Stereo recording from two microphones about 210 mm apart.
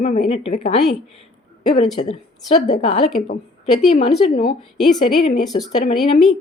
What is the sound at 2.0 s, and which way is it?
A woman's voice, 30° left (ahead or behind).